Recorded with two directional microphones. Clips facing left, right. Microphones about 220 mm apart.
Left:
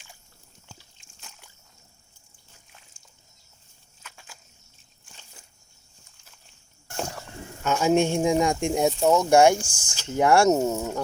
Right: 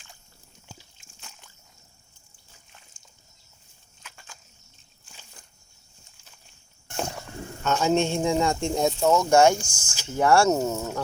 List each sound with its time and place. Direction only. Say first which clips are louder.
0.7 s biting: right 3 dB; 5° right (ahead or behind)
4.0 s a sound: even; 5° left (ahead or behind)
7.6 s speech: left 2 dB; 10° left (ahead or behind)
9.6 s speech: left 2 dB; 30° left (ahead or behind)
10.1 s speech: left 1 dB; 15° left (ahead or behind)